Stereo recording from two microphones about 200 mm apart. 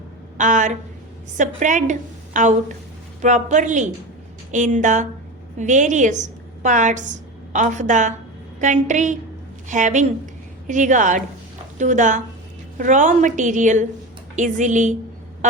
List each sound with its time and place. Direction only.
0.3 s a woman's voice: 40° right (ahead or behind)